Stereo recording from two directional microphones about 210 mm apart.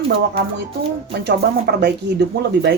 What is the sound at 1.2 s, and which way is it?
Speech, 50° right (ahead or behind).